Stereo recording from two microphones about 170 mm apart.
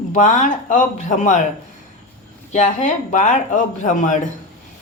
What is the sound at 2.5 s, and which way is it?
Speech, 45° left (ahead or behind).